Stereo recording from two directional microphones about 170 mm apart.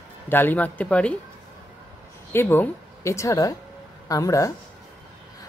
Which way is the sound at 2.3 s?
10° left (ahead or behind).